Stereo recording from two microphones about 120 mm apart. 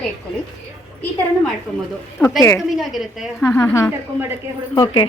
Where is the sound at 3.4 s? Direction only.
25° left (ahead or behind).